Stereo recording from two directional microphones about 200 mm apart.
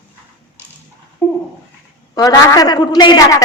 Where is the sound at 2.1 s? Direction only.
15° left (ahead or behind).